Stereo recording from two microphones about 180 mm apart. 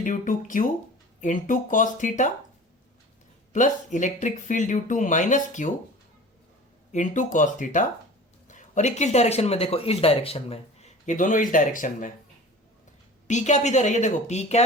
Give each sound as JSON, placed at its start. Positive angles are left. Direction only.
{"t": 0.0, "sound": "speech", "side_deg": 45}
{"t": 3.5, "sound": "speech", "side_deg": 45}
{"t": 6.9, "sound": "speech", "side_deg": 45}
{"t": 13.2, "sound": "speech", "side_deg": 40}